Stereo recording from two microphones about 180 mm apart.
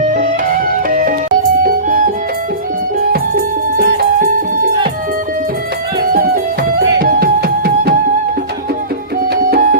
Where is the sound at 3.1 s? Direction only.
60° right (ahead or behind).